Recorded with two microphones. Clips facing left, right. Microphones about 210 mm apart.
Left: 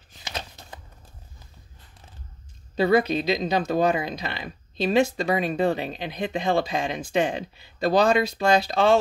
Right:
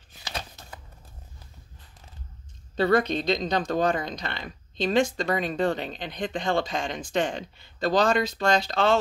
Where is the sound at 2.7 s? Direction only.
10° left (ahead or behind).